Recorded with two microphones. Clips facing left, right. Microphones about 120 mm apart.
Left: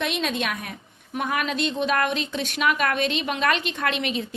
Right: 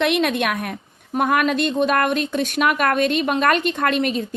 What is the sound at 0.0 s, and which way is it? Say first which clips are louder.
A woman's voice: right 7 dB; 60° right (ahead or behind).